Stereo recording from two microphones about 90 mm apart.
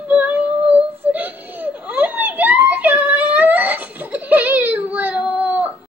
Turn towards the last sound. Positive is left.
turn(degrees=-15)  # may be behind; listen again after turning